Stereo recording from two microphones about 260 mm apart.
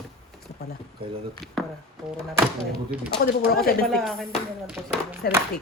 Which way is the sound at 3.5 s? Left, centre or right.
Left.